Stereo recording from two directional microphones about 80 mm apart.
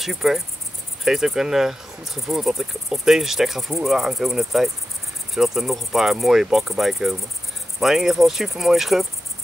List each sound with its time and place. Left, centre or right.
0.0 s speech: centre